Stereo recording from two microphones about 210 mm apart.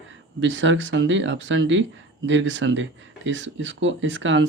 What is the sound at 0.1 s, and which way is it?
Speech, 65° right (ahead or behind).